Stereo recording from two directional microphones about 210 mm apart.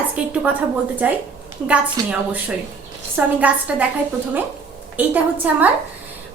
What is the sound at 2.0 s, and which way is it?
A woman's voice, 5° right (ahead or behind).